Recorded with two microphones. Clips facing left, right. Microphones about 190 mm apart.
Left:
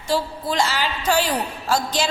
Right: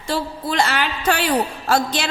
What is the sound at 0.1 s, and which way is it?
Music, 60° right (ahead or behind).